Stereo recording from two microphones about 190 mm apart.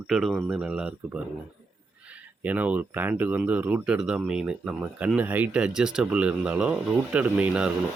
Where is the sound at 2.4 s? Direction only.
10° right (ahead or behind).